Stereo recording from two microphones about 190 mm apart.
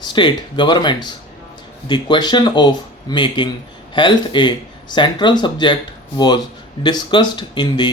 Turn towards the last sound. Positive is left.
turn(degrees=25)  # may be behind; listen again after turning